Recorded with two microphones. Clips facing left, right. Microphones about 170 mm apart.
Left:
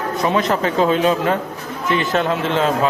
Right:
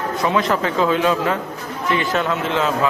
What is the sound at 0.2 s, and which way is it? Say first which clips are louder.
A man's voice: left 1 dB; 20° left (ahead or behind).